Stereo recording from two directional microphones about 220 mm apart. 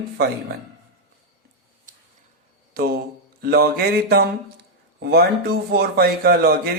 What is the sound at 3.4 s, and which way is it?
Speech, 45° right (ahead or behind).